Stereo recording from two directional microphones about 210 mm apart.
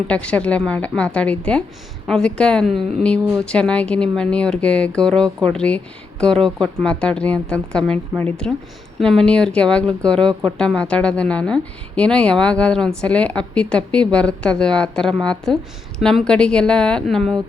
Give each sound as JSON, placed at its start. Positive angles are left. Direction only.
{"t": 0.1, "sound": "a woman's voice", "side_deg": 5}